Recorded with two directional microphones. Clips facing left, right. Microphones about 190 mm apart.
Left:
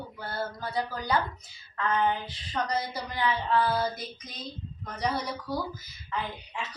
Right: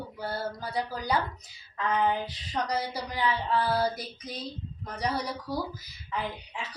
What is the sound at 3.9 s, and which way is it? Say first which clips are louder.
Female singing: right 2 dB; 35° right (ahead or behind).